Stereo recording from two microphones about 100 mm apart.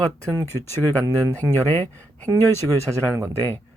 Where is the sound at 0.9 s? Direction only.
30° right (ahead or behind).